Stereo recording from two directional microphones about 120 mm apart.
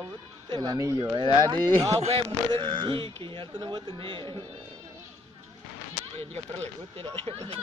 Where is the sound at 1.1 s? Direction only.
40° right (ahead or behind).